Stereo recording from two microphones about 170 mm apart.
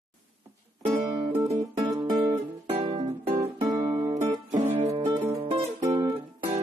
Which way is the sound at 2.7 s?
40° right (ahead or behind).